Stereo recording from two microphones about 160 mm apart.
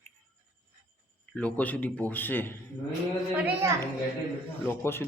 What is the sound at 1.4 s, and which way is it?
Speech, 10° left (ahead or behind).